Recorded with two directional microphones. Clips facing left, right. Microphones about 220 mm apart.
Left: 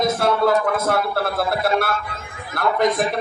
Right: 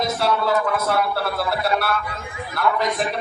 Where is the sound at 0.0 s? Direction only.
50° left (ahead or behind).